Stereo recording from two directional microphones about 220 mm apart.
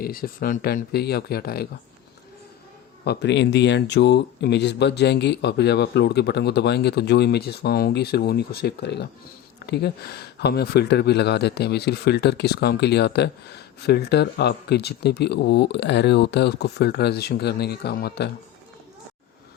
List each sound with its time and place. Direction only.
0.0 s speech: 40° left (ahead or behind)
3.0 s speech: 50° left (ahead or behind)